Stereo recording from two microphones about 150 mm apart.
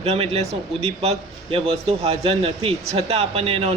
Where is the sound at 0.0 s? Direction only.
45° right (ahead or behind).